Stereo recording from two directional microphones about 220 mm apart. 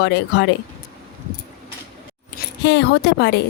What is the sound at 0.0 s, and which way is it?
Speech, 50° left (ahead or behind).